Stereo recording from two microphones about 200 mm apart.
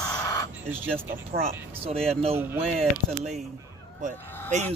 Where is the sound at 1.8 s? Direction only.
30° right (ahead or behind).